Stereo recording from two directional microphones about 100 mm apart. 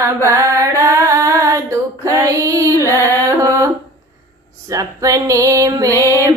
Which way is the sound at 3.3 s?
30° right (ahead or behind).